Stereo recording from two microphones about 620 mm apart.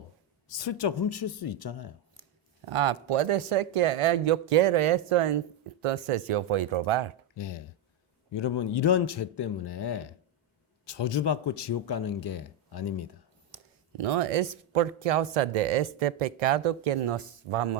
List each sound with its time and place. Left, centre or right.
0.6 s a man's voice: left
2.6 s speech: right
8.3 s a man's voice: left
14.0 s speech: right